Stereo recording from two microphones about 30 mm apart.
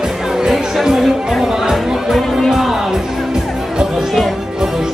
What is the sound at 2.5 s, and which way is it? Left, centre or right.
Music, centre.